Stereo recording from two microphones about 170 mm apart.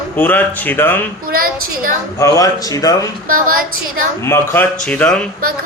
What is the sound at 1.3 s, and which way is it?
Speech, 60° right (ahead or behind).